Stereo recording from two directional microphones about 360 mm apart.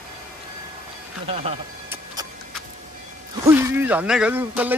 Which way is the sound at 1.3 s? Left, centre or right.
Centre.